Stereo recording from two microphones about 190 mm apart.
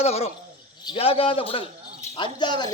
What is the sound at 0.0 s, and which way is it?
A woman's voice, 35° left (ahead or behind).